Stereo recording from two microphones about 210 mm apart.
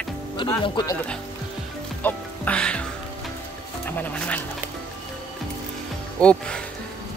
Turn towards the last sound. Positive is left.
turn(degrees=5)  # may be behind; listen again after turning